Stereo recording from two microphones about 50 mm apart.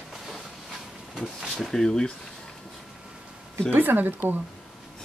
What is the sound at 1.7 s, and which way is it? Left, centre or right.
Speech, centre.